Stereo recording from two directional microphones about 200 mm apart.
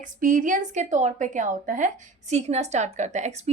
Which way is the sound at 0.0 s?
40° right (ahead or behind).